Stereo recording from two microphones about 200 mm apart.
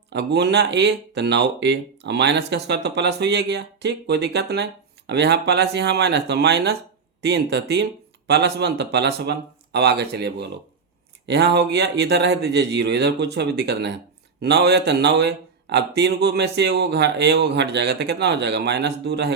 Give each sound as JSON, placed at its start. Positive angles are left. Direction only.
{"t": 0.1, "sound": "speech", "side_deg": -55}